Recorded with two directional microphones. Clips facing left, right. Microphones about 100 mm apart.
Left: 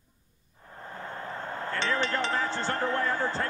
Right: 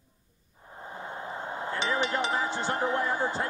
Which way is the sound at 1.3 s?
15° right (ahead or behind).